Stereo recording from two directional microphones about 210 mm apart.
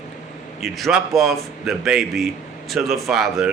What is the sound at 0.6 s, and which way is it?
Speech, centre (ahead or behind).